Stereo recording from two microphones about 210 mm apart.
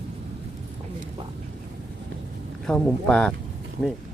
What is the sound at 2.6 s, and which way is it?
Speech, 5° left (ahead or behind).